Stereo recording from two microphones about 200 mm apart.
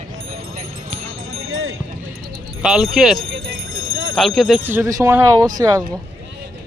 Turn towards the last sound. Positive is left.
turn(degrees=-15)  # may be behind; listen again after turning